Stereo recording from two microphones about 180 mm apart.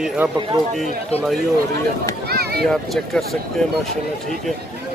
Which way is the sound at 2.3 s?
60° right (ahead or behind).